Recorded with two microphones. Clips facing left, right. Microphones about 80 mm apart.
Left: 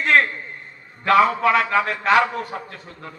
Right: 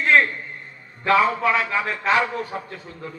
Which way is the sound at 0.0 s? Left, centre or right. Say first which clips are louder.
Even; left.